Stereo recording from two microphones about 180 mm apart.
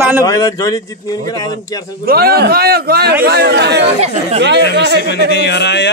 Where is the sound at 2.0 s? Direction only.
60° right (ahead or behind).